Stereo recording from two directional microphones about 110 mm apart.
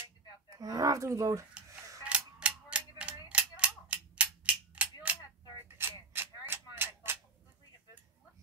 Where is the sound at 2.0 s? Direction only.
10° right (ahead or behind).